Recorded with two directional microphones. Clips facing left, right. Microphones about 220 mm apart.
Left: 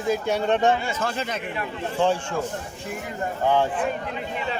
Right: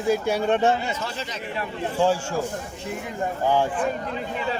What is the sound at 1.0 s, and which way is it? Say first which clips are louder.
Speech: left 4 dB; 55° left (ahead or behind).